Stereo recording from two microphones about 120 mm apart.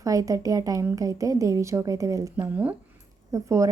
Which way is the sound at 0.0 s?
30° right (ahead or behind).